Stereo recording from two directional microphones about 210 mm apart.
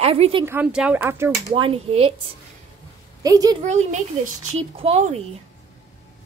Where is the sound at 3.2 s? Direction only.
15° right (ahead or behind).